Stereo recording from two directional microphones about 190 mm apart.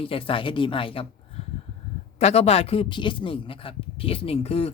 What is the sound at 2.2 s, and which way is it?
Speech, 35° left (ahead or behind).